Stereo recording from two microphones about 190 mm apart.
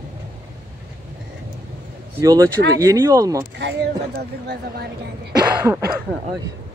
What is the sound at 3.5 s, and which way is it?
Speech, 65° right (ahead or behind).